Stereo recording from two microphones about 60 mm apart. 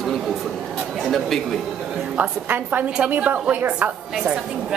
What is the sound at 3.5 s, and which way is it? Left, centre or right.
Speech, right.